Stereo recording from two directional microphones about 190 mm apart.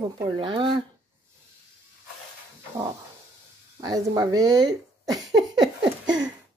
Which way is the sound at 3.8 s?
20° right (ahead or behind).